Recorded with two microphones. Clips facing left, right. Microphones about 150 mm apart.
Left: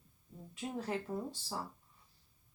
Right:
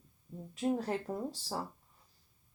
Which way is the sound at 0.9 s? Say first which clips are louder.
Right 2 dB; 40° right (ahead or behind).